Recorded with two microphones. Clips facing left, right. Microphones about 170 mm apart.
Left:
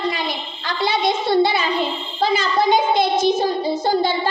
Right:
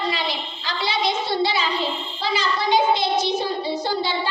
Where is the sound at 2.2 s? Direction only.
50° left (ahead or behind).